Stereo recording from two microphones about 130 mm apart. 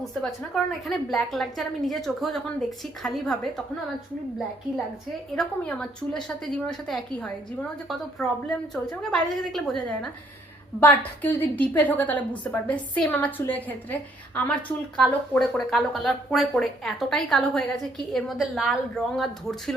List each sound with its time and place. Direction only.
0.0 s a woman's voice: centre (ahead or behind)
5.4 s a woman's voice: 10° left (ahead or behind)
10.8 s a woman's voice: 15° left (ahead or behind)